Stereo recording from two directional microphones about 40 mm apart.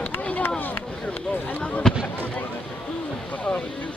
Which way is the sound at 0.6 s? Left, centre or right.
Left.